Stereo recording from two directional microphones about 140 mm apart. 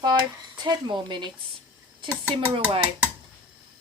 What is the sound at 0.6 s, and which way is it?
Speech, 35° right (ahead or behind).